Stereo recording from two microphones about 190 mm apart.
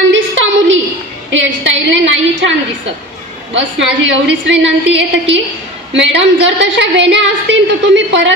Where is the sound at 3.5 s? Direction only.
70° right (ahead or behind).